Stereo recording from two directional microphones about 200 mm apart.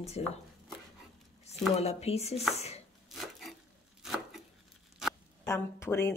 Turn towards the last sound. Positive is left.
turn(degrees=10)  # may be behind; listen again after turning